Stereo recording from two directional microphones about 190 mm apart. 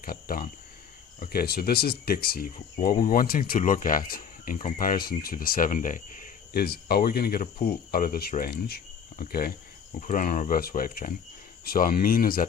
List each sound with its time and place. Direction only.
0.0 s speech: 50° left (ahead or behind)